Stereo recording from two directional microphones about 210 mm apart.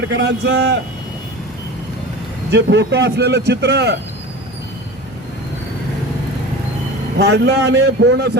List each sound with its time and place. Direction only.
0.1 s a man's voice: 55° right (ahead or behind)
2.5 s speech: 55° right (ahead or behind)
7.2 s a man's voice: 55° right (ahead or behind)